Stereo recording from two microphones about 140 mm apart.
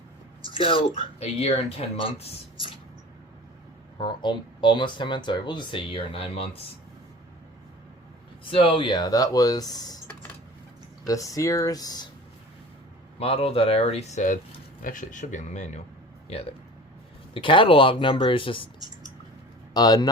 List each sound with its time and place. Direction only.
0.4 s speech: 40° left (ahead or behind)
3.9 s speech: 35° left (ahead or behind)
8.4 s speech: 40° left (ahead or behind)
11.0 s speech: 25° left (ahead or behind)
13.1 s speech: 45° left (ahead or behind)
14.8 s speech: 75° left (ahead or behind); by 15.8 s 60° left (ahead or behind)
16.3 s speech: 45° left (ahead or behind)
19.7 s speech: 30° left (ahead or behind)